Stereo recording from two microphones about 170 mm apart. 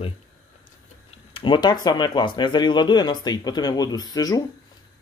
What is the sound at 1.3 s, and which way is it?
Speech, 30° left (ahead or behind).